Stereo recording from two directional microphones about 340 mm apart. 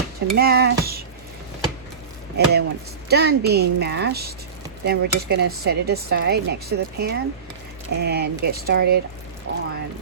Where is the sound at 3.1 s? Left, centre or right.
Right.